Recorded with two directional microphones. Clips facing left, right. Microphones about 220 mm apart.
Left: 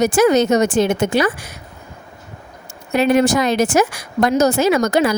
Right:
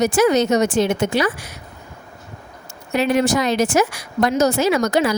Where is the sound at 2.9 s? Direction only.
50° left (ahead or behind).